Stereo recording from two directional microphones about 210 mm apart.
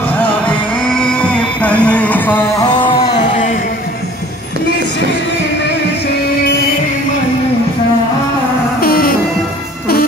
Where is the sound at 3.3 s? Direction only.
35° left (ahead or behind).